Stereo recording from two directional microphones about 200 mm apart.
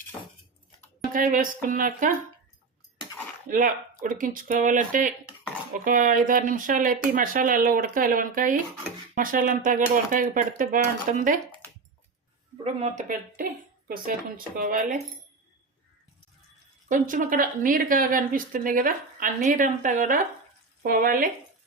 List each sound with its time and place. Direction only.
1.1 s speech: 45° right (ahead or behind)
3.5 s speech: 40° right (ahead or behind)
12.6 s speech: 35° right (ahead or behind)
16.9 s speech: 40° right (ahead or behind)